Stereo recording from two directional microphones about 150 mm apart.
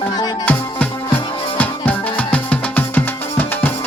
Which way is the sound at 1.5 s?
10° left (ahead or behind).